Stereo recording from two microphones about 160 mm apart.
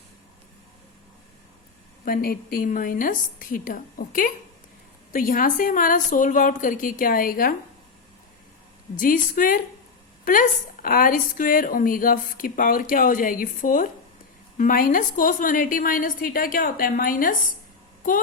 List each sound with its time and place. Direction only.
2.0 s a woman's voice: 65° left (ahead or behind)
9.0 s a woman's voice: 60° left (ahead or behind)